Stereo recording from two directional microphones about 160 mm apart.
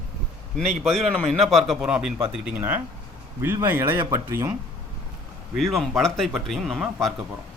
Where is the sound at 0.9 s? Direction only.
Centre (ahead or behind); by 4.5 s 15° right (ahead or behind).